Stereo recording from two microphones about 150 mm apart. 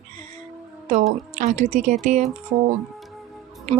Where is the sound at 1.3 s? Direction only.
50° right (ahead or behind).